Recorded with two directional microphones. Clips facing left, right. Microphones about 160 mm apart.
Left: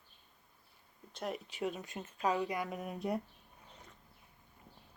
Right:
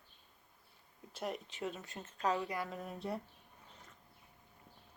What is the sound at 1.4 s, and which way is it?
Speech, 15° left (ahead or behind).